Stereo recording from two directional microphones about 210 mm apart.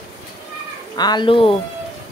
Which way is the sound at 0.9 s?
20° left (ahead or behind).